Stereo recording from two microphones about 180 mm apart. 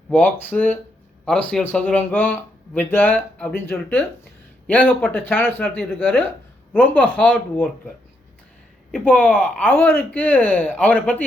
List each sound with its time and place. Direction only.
0.1 s speech: 10° left (ahead or behind)
8.9 s speech: 10° left (ahead or behind)